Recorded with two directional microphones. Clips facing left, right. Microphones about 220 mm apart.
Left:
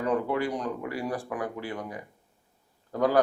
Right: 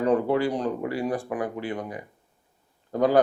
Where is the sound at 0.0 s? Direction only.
30° right (ahead or behind).